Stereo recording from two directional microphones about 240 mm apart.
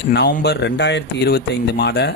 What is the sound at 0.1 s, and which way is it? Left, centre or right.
Speech, left.